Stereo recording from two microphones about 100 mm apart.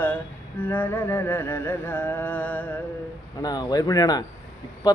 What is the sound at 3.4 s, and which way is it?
Speech, 40° left (ahead or behind).